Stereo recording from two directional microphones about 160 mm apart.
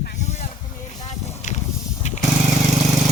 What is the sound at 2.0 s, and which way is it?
Vehicle, 45° left (ahead or behind).